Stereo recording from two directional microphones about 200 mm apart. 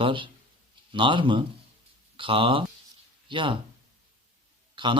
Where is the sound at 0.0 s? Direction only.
25° right (ahead or behind).